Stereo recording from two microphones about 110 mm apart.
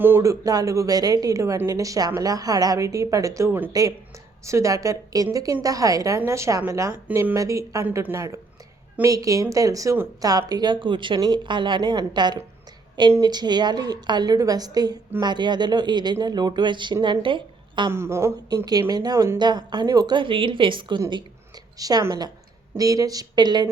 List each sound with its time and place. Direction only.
0.0 s a woman's voice: 25° right (ahead or behind)
3.7 s a woman's voice: 35° right (ahead or behind)
17.9 s speech: 25° right (ahead or behind)
18.4 s a woman's voice: 35° right (ahead or behind)
21.1 s a sound: 40° right (ahead or behind)
22.8 s a woman's voice: 35° right (ahead or behind)